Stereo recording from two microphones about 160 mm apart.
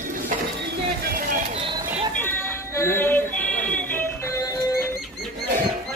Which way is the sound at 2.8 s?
15° left (ahead or behind).